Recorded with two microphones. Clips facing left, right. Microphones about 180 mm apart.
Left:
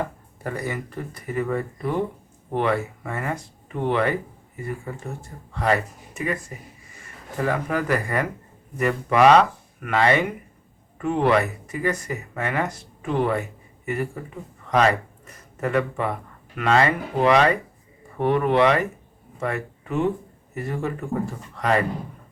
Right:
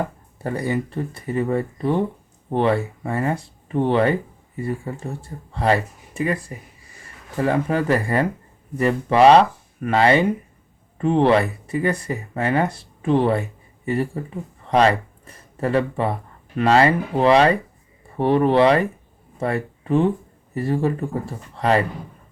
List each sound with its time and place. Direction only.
0.4 s speech: 30° right (ahead or behind)